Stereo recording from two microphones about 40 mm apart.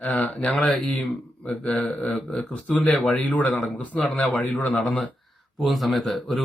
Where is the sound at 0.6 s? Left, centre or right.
Left.